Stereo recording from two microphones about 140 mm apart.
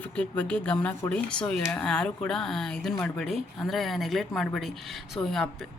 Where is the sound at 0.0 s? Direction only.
10° left (ahead or behind).